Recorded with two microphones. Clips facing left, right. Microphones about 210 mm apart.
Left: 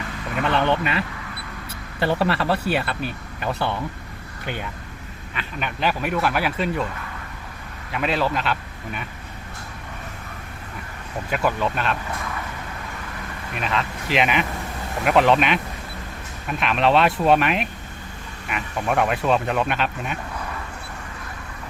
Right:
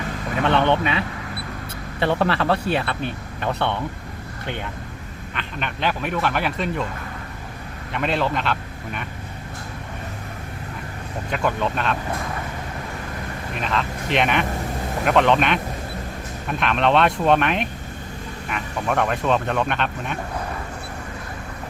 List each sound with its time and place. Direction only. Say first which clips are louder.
0.4 s speech: right 2 dB; centre (ahead or behind)
5.3 s speech: even; 5° left (ahead or behind)
7.9 s speech: even; centre (ahead or behind)
11.3 s speech: even; 5° left (ahead or behind)
13.6 s speech: even; centre (ahead or behind)